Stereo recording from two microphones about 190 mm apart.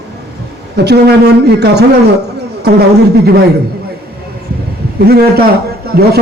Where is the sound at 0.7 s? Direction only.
60° right (ahead or behind).